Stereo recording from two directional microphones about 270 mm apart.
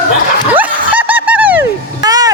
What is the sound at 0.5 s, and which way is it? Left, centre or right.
Snicker, centre.